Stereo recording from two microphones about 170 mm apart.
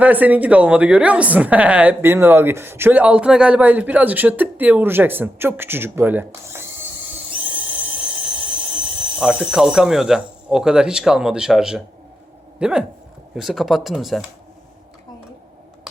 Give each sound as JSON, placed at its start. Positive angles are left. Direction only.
{"t": 0.0, "sound": "a woman's voice", "side_deg": -10}
{"t": 8.7, "sound": "speech", "side_deg": -5}